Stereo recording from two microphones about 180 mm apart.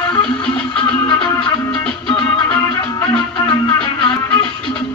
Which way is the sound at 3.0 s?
30° left (ahead or behind).